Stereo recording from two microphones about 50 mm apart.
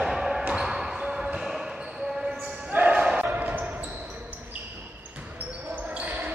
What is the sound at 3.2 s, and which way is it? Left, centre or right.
Basketball bounce, right.